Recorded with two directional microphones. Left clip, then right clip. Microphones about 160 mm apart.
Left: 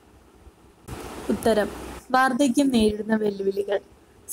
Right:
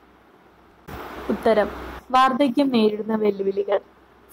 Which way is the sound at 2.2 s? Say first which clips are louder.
Right 3 dB; 30° left (ahead or behind).